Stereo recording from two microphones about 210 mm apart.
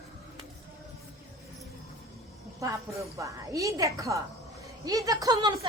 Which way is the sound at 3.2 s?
15° right (ahead or behind).